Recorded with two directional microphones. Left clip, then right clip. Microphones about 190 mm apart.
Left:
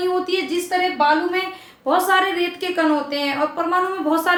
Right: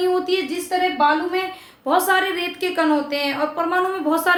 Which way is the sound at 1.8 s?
20° right (ahead or behind).